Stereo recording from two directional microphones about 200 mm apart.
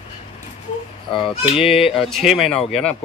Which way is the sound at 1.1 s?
25° left (ahead or behind).